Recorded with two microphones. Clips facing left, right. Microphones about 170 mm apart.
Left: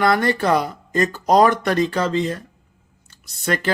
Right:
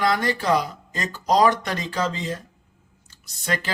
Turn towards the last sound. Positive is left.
turn(degrees=55)  # may be behind; listen again after turning